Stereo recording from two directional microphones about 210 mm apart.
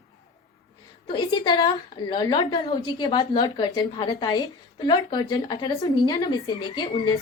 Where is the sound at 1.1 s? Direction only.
20° left (ahead or behind).